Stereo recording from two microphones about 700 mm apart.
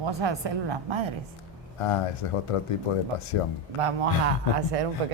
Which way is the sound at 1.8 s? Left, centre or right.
Left.